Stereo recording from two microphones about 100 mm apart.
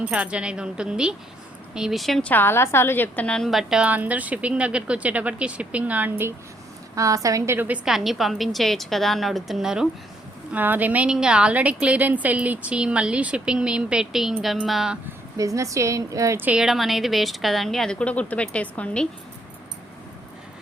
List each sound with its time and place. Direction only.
0.0 s a woman's voice: 15° right (ahead or behind); by 2.3 s 5° left (ahead or behind)
2.3 s a woman's voice: 20° left (ahead or behind); by 6.3 s 20° right (ahead or behind)
6.9 s a woman's voice: 35° right (ahead or behind)
7.9 s a woman's voice: 5° right (ahead or behind)
10.5 s a woman's voice: 20° right (ahead or behind); by 14.9 s centre (ahead or behind)
15.4 s a woman's voice: 35° right (ahead or behind)
16.6 s a woman's voice: centre (ahead or behind)
18.0 s speech: 15° left (ahead or behind)